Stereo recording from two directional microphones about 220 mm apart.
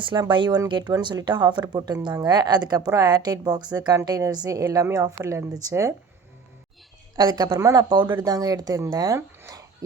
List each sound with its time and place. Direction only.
0.0 s a woman's voice: 20° right (ahead or behind)
7.2 s a woman's voice: 15° right (ahead or behind)